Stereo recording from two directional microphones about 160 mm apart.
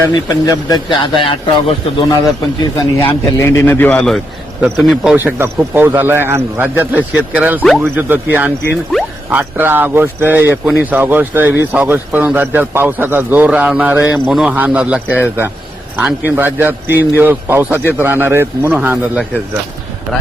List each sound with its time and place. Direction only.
0.1 s speech: 25° left (ahead or behind)
3.0 s a man's voice: 15° left (ahead or behind); by 19.2 s 10° right (ahead or behind)